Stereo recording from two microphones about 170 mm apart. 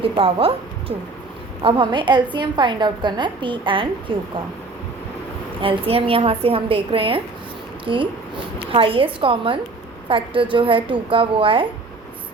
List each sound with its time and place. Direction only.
0.0 s a woman's voice: 35° right (ahead or behind)
5.5 s a woman's voice: 30° right (ahead or behind)